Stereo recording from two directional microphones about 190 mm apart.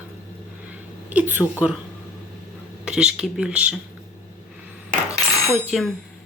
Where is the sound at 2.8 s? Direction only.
5° right (ahead or behind).